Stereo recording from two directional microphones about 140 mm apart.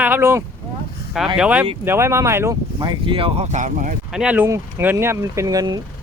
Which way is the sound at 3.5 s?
60° right (ahead or behind).